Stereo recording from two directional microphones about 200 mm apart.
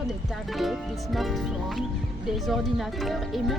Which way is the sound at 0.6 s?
Centre (ahead or behind).